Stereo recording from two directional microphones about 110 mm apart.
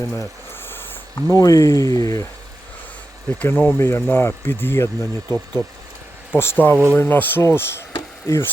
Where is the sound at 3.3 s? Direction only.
15° left (ahead or behind); by 8.4 s 30° left (ahead or behind).